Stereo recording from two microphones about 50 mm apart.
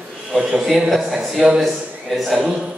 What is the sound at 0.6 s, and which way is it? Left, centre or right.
A man's voice, centre.